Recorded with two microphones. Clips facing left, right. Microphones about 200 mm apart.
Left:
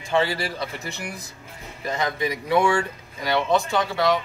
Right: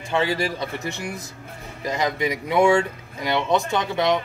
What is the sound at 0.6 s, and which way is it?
Speech, 25° right (ahead or behind).